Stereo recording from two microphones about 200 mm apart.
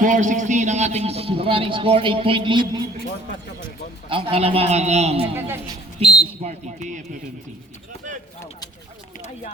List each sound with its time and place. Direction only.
0.0 s a man's voice: 40° right (ahead or behind); by 2.8 s 25° right (ahead or behind)
4.1 s a man's voice: 30° right (ahead or behind)
5.3 s a woman's voice: 10° right (ahead or behind)
6.0 s a man's voice: 30° right (ahead or behind)